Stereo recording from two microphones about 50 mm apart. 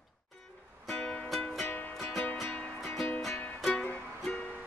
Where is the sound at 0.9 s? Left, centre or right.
Left.